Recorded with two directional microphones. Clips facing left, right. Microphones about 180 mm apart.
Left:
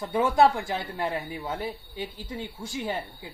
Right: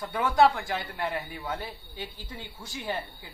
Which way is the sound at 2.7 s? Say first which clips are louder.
Left 2 dB; 25° left (ahead or behind).